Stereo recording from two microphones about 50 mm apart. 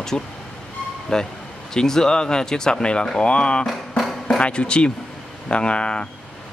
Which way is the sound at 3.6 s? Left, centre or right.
Centre.